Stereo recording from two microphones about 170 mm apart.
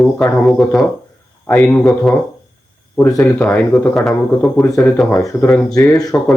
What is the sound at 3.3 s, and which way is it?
Speech, 5° left (ahead or behind).